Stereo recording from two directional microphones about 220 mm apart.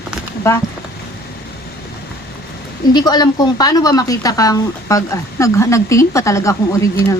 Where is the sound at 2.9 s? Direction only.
20° left (ahead or behind).